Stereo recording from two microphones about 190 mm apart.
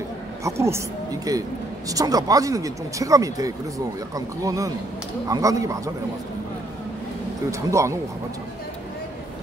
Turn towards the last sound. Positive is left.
turn(degrees=-15)  # may be behind; listen again after turning